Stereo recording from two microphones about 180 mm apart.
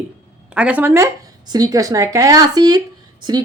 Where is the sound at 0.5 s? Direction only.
5° right (ahead or behind).